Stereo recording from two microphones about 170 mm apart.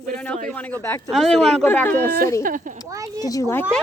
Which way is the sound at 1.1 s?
Centre (ahead or behind).